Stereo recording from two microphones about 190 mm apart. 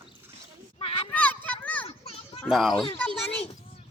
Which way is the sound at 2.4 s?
Centre (ahead or behind).